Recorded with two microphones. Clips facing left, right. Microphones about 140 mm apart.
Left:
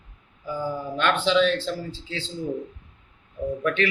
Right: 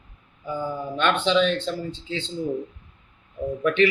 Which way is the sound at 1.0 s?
20° right (ahead or behind).